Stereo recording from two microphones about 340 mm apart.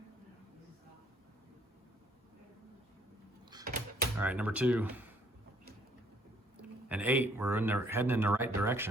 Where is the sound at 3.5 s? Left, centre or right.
Centre.